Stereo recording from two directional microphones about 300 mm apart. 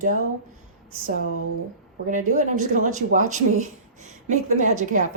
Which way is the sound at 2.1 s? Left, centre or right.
Right.